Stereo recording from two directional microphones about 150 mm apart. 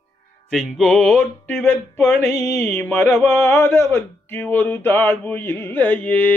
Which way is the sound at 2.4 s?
20° left (ahead or behind).